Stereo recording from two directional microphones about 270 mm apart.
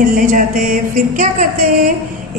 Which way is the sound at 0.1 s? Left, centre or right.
Right.